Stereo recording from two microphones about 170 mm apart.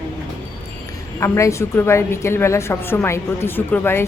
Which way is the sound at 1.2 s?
15° left (ahead or behind).